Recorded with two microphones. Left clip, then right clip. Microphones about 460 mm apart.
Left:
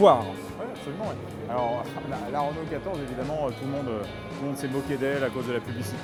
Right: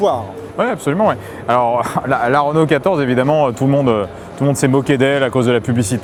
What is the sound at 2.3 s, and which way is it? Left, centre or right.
Speech, right.